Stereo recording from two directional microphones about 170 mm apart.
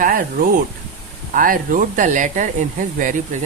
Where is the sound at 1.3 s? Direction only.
55° right (ahead or behind).